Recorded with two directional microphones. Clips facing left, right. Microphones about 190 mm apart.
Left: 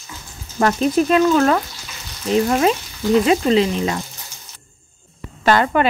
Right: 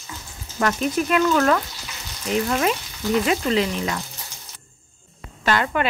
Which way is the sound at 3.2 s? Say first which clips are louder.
Left 6 dB; 25° left (ahead or behind).